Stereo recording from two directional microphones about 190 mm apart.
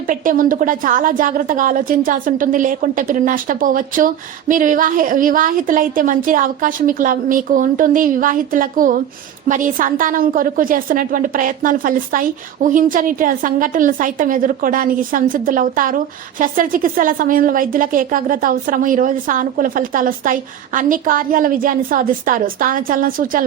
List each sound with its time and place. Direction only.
0.1 s a woman's voice: 45° right (ahead or behind)